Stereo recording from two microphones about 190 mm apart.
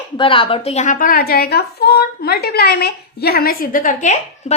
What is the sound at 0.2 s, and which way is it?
A woman's voice, 30° left (ahead or behind).